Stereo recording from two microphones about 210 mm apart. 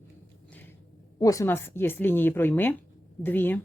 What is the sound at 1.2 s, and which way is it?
A woman's voice, 15° left (ahead or behind).